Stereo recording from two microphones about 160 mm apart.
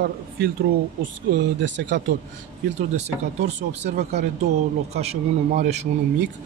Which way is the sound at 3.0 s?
45° right (ahead or behind).